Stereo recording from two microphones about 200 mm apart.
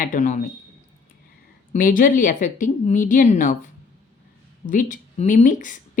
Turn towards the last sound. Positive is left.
turn(degrees=40)  # may be behind; listen again after turning